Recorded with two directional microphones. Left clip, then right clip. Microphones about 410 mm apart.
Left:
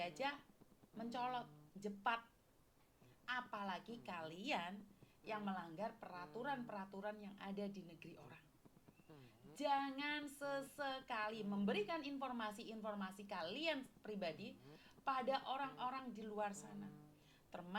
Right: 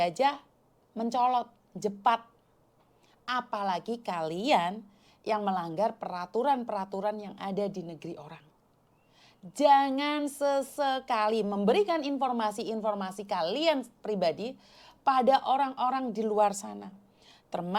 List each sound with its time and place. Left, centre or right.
0.0 s a woman's voice: right
3.2 s a woman's voice: right
9.6 s a woman's voice: right